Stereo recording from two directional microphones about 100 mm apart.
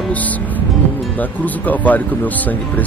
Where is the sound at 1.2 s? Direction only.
15° left (ahead or behind).